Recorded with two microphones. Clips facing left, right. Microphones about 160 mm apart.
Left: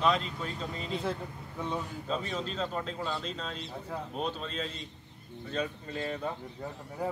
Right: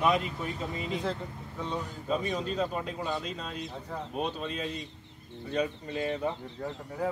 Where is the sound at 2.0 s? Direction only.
10° right (ahead or behind).